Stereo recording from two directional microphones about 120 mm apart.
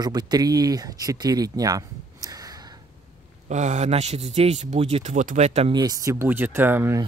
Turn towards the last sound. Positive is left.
turn(degrees=-20)  # may be behind; listen again after turning